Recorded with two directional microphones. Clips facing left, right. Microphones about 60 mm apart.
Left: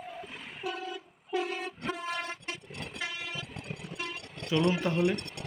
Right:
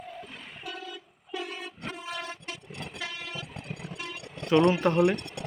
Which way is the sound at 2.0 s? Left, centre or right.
Left.